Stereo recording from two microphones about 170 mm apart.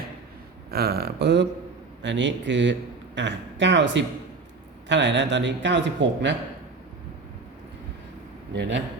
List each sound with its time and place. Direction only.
0.7 s speech: 65° right (ahead or behind)
2.0 s a man's voice: 90° right